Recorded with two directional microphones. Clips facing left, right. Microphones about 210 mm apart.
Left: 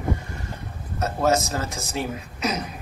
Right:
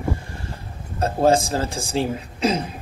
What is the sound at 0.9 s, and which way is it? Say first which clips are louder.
Speech: right 4 dB; 30° right (ahead or behind).